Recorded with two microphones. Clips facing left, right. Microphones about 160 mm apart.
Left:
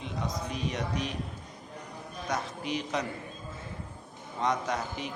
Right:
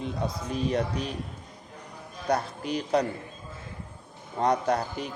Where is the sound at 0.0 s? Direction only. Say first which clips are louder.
Right 3 dB; 35° right (ahead or behind).